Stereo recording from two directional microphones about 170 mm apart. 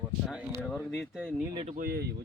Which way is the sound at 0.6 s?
5° left (ahead or behind).